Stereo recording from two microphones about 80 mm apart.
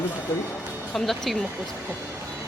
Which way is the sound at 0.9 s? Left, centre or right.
Centre.